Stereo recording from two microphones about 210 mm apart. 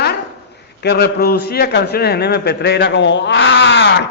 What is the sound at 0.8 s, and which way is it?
A man's voice, 50° left (ahead or behind).